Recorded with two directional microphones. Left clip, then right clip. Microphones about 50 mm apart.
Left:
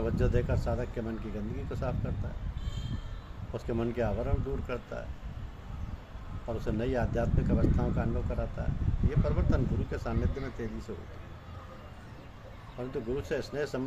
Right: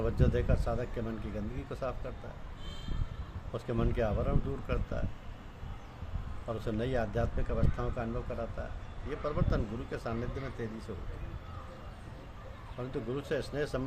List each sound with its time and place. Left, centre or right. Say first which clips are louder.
0.0 s speech: left 1 dB; right
3.5 s speech: left 2 dB; right
6.6 s speech: left 2 dB; right
12.9 s speech: left 2 dB; right